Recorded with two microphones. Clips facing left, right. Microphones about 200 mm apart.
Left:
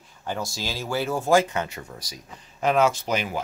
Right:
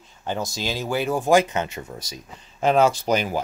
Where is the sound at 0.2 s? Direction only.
20° right (ahead or behind).